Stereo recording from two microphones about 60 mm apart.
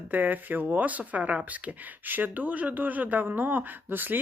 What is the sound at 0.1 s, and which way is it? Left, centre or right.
Speech, right.